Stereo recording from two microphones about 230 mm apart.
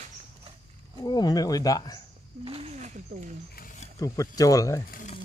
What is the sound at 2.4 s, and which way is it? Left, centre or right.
Speech, right.